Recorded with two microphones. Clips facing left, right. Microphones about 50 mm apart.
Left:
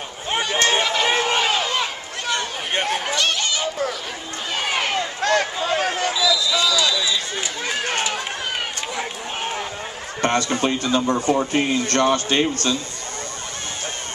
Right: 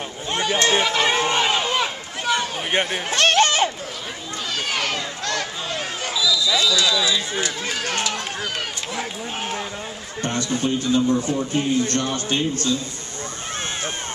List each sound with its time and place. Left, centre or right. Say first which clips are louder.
0.7 s run: right 1 dB; centre
1.8 s run: right 1 dB; centre
3.1 s a sound: right 5 dB; right
4.6 s run: left 3 dB; centre
5.2 s a sound: left 6 dB; left
6.3 s a sound: even; centre
7.0 s run: right 2 dB; centre
7.6 s run: left 1 dB; centre
8.9 s a sound: even; centre
10.2 s a man's voice: left 4 dB; left
11.1 s speech: left 1 dB; left
11.3 s a man's voice: left 1 dB; left